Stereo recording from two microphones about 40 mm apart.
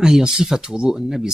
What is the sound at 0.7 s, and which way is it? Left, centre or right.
Speech, centre.